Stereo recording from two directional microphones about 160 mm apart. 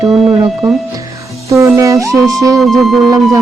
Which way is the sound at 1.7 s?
20° right (ahead or behind).